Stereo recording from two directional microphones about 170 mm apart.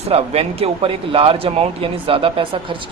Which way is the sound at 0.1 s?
35° right (ahead or behind).